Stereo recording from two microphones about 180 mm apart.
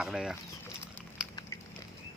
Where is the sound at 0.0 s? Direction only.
5° right (ahead or behind).